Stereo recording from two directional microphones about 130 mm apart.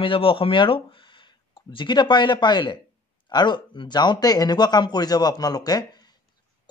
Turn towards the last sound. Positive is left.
turn(degrees=30)  # may be behind; listen again after turning